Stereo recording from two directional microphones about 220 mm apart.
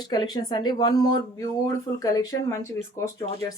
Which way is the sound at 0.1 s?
20° left (ahead or behind).